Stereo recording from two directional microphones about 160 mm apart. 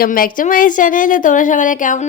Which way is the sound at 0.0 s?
60° left (ahead or behind).